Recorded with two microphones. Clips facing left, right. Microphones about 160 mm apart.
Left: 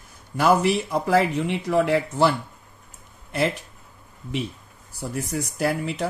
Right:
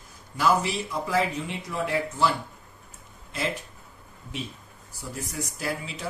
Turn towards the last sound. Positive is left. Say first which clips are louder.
# left 8 dB
turn(degrees=65)  # may be behind; listen again after turning